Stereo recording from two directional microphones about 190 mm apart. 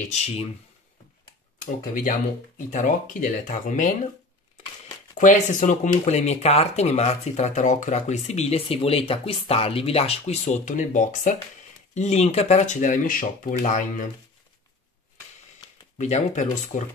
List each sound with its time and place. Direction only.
0.1 s speech: 35° left (ahead or behind)
2.7 s speech: 45° left (ahead or behind)
5.1 s speech: 40° left (ahead or behind)
16.0 s speech: 35° left (ahead or behind)